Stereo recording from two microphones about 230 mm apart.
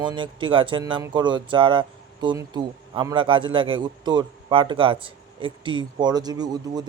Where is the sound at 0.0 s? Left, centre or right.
Centre.